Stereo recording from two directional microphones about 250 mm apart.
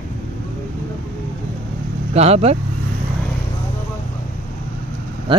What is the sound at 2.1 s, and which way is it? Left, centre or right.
Speech, right.